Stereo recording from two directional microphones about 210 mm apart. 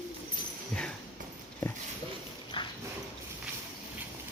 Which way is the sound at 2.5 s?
25° left (ahead or behind).